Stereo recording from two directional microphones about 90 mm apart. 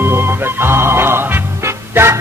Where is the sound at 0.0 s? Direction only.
25° right (ahead or behind).